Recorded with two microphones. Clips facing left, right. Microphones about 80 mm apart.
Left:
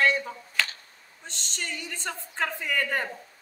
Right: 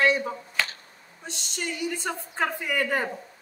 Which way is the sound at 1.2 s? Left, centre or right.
Centre.